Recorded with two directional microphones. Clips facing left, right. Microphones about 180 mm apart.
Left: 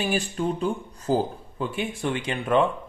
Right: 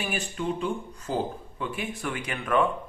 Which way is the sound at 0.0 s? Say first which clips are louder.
Left 5 dB; 35° left (ahead or behind).